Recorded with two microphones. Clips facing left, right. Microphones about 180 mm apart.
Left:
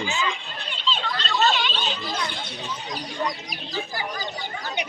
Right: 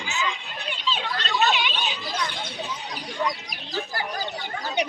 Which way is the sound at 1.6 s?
10° right (ahead or behind).